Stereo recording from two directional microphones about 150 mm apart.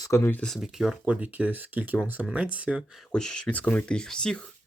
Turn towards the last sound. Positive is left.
turn(degrees=5)  # may be behind; listen again after turning